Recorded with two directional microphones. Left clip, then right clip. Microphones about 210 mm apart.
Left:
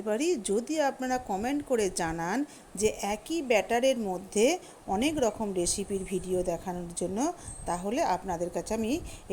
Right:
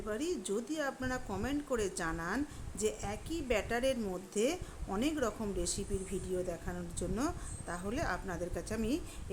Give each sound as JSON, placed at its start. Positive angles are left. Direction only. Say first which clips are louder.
{"t": 0.0, "sound": "a woman's voice", "louder": "left 9 dB", "side_deg": 25}